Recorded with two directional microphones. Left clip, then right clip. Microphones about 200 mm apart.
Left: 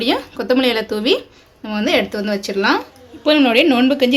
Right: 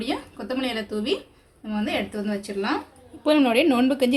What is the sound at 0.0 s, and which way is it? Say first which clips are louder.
A woman's voice: left 11 dB; 50° left (ahead or behind).